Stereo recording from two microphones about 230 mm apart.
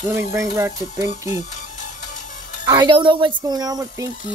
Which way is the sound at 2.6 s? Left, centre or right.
Centre.